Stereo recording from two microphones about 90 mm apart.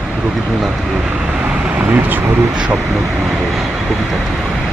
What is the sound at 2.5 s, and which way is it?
Speech, 10° right (ahead or behind).